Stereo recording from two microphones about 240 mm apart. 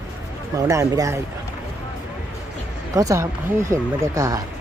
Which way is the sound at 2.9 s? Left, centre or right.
Centre.